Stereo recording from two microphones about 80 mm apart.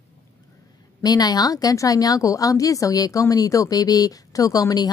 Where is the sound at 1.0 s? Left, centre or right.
Left.